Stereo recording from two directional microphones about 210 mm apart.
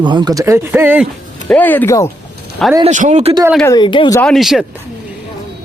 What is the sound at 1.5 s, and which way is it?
Speech, 10° left (ahead or behind).